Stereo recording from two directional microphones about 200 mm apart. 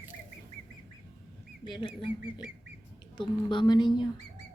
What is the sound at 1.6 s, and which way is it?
A woman's voice, 25° left (ahead or behind).